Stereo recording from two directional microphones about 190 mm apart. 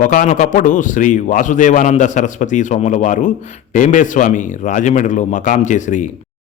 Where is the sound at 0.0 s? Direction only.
45° left (ahead or behind).